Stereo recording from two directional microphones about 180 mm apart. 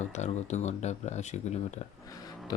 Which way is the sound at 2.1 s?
20° left (ahead or behind).